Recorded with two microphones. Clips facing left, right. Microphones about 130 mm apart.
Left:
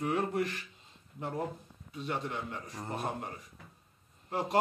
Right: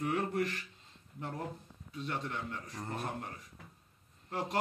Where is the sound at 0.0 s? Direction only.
20° left (ahead or behind).